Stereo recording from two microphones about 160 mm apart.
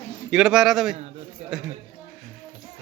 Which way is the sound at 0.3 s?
5° right (ahead or behind).